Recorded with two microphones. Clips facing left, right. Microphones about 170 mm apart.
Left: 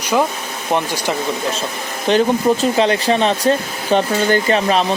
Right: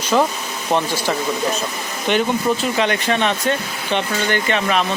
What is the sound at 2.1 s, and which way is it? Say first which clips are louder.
Speech: left 4 dB; 35° left (ahead or behind).